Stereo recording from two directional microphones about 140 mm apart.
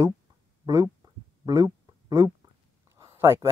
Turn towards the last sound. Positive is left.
turn(degrees=-20)  # may be behind; listen again after turning